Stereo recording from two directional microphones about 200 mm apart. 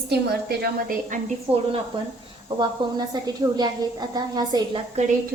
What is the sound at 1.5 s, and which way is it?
A woman's voice, 30° right (ahead or behind).